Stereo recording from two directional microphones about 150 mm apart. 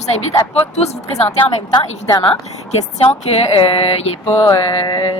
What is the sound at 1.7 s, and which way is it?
A woman's voice, 30° left (ahead or behind).